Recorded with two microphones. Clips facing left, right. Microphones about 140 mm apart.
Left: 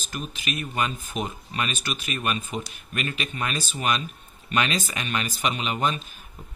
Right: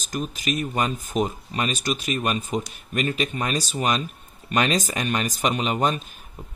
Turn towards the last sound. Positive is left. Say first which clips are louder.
# right 3 dB
turn(degrees=-40)  # may be behind; listen again after turning